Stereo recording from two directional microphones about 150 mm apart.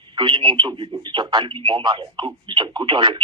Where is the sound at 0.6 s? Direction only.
30° right (ahead or behind).